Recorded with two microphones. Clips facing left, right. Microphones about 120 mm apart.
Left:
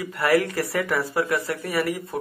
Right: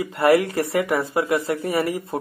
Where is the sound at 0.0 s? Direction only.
25° right (ahead or behind).